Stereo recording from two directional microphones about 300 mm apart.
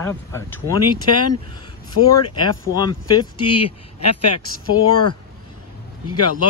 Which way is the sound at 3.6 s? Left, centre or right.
Left.